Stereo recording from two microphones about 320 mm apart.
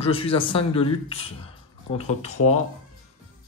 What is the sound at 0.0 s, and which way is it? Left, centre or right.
Speech, centre.